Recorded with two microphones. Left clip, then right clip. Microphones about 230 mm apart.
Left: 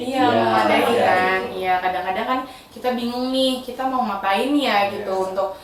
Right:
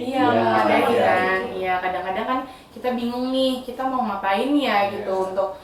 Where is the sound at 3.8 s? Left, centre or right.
Centre.